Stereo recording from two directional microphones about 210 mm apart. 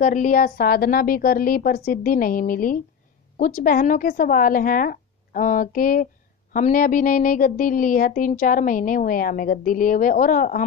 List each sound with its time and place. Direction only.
0.0 s a woman's voice: 40° left (ahead or behind)